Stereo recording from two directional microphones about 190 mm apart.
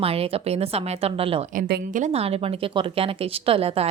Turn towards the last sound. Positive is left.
turn(degrees=-30)  # may be behind; listen again after turning